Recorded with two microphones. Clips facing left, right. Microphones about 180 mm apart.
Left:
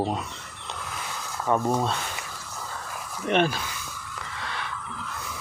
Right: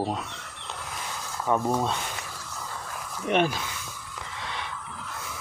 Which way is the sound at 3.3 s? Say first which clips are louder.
Left 1 dB; 10° right (ahead or behind).